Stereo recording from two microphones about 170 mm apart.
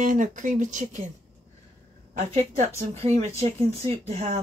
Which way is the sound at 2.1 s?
40° right (ahead or behind).